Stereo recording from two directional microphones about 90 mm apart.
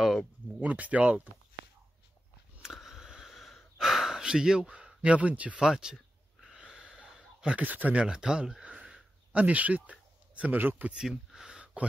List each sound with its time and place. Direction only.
0.0 s speech: centre (ahead or behind)
0.6 s speech: 15° right (ahead or behind)
2.6 s sniff: 5° right (ahead or behind)
6.7 s wheeze: 10° right (ahead or behind)
7.4 s speech: 15° right (ahead or behind)